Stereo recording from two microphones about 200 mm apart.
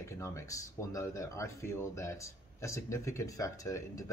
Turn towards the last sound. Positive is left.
turn(degrees=15)  # may be behind; listen again after turning